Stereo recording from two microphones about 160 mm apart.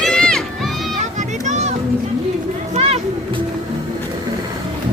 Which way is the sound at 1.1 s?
50° right (ahead or behind).